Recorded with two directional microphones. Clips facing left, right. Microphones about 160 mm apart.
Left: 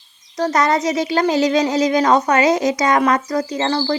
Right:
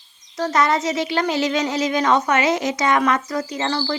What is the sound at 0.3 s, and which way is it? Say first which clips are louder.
Speech: left 2 dB; 40° left (ahead or behind).